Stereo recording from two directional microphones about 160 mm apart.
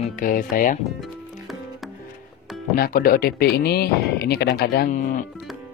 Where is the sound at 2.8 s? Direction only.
65° left (ahead or behind).